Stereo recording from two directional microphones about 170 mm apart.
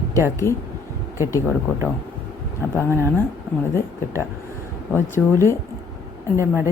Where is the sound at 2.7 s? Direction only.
15° left (ahead or behind).